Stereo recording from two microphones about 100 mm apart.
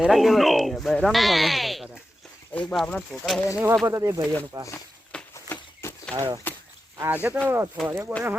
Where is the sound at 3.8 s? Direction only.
30° right (ahead or behind).